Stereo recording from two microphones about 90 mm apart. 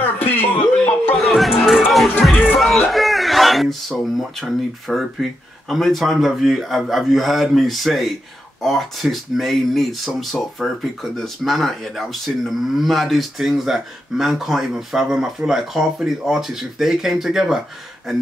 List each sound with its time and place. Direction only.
0.0 s a sound: 20° left (ahead or behind)
1.1 s music: centre (ahead or behind)
2.3 s music: 15° left (ahead or behind)
2.6 s a man's voice: centre (ahead or behind)